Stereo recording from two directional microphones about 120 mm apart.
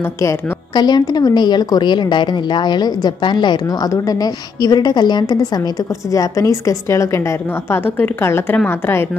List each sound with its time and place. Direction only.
0.7 s a woman's voice: 35° left (ahead or behind); by 9.0 s 20° left (ahead or behind)